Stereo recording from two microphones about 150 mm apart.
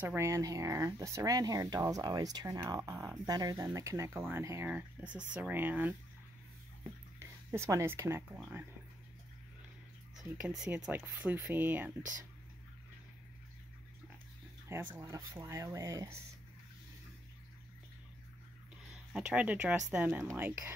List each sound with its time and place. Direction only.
0.0 s speech: 15° right (ahead or behind)
7.2 s speech: 15° right (ahead or behind)
10.2 s speech: 10° right (ahead or behind)
15.0 s speech: 20° right (ahead or behind)
19.1 s speech: 5° right (ahead or behind)